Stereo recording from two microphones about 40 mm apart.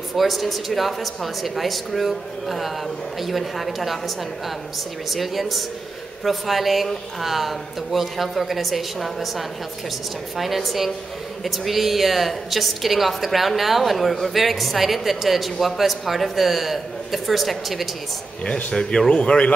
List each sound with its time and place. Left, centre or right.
0.1 s speech: centre
5.1 s speech: centre
18.7 s a man's voice: centre